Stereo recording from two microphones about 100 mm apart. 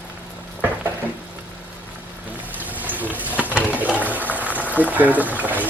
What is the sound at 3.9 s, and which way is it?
Boiling, 15° right (ahead or behind).